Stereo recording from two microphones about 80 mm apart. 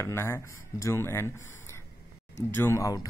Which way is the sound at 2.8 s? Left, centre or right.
Left.